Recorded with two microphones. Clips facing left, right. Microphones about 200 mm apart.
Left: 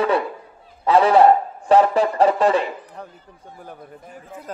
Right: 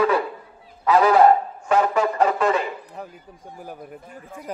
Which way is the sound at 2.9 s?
10° right (ahead or behind).